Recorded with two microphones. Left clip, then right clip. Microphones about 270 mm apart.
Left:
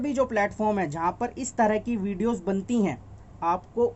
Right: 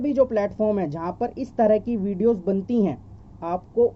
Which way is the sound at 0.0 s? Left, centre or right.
Centre.